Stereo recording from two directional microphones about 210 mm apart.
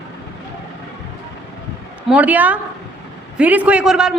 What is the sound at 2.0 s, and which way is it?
A man's voice, 5° right (ahead or behind).